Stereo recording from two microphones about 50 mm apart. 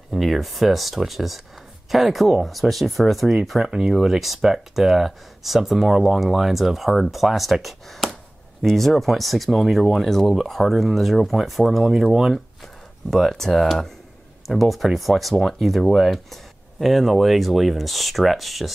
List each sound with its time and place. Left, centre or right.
0.1 s speech: centre
13.1 s speech: centre